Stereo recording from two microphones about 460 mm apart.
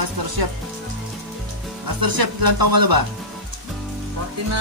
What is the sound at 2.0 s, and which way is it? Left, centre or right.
Speech, right.